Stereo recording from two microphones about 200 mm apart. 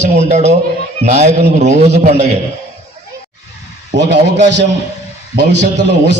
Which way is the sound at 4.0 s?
60° right (ahead or behind).